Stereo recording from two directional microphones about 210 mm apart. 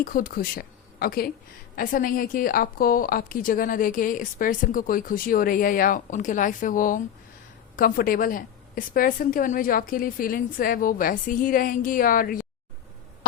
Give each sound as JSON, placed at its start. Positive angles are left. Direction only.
{"t": 0.0, "sound": "a woman's voice", "side_deg": 40}